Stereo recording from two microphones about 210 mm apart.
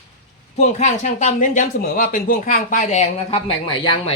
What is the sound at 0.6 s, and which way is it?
Speech, 35° left (ahead or behind).